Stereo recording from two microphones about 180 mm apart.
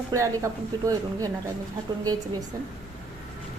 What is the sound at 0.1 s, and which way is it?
Speech, 15° right (ahead or behind).